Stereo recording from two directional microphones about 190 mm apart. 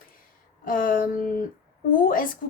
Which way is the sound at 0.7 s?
45° left (ahead or behind).